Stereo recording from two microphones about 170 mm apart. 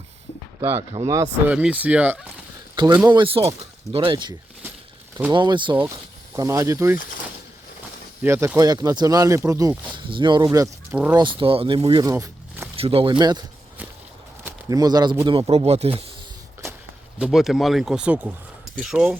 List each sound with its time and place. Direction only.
0.9 s speech: 35° right (ahead or behind)
1.5 s speech: 10° right (ahead or behind)
2.7 s speech: 25° right (ahead or behind)
8.2 s speech: 15° right (ahead or behind); by 12.0 s 30° right (ahead or behind)
12.0 s a sound: 20° right (ahead or behind)
12.7 s speech: 35° right (ahead or behind)
14.4 s speech: 20° right (ahead or behind)
15.3 s speech: 35° right (ahead or behind)
17.2 s speech: 5° right (ahead or behind)